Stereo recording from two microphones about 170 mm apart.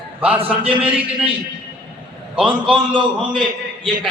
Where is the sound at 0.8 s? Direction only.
5° right (ahead or behind).